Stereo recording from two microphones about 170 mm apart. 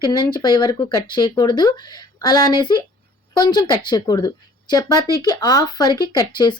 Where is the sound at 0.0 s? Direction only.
25° left (ahead or behind).